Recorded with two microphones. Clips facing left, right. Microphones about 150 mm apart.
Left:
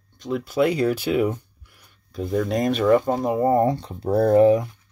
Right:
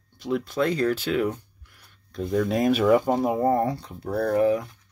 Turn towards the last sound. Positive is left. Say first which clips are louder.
# left 6 dB
turn(degrees=25)  # may be behind; listen again after turning